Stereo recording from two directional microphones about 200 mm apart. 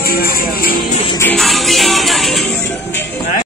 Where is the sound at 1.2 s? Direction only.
5° left (ahead or behind).